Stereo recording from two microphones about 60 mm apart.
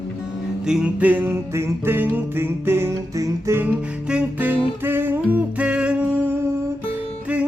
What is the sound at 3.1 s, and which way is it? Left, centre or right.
Music, right.